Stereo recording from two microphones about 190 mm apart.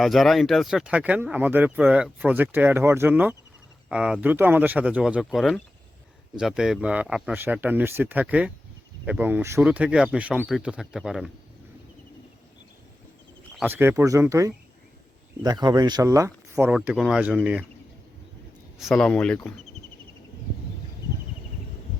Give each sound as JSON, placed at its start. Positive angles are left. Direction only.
{"t": 0.0, "sound": "speech", "side_deg": 0}
{"t": 13.6, "sound": "speech", "side_deg": -10}
{"t": 18.8, "sound": "speech", "side_deg": 0}